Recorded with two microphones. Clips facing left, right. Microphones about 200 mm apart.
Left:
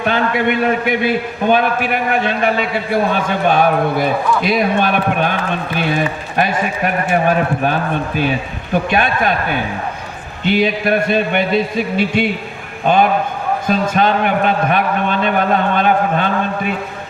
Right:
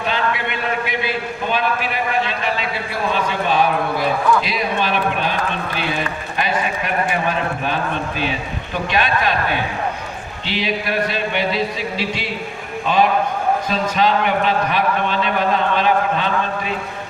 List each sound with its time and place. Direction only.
0.0 s a man's voice: 55° left (ahead or behind)
6.3 s a man's voice: 50° left (ahead or behind)
10.4 s a man's voice: 50° left (ahead or behind)
13.7 s a man's voice: 50° left (ahead or behind)